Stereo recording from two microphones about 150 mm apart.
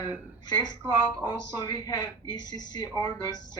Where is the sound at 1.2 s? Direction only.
25° left (ahead or behind).